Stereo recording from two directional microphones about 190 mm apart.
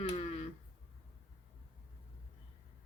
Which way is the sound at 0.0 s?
30° left (ahead or behind).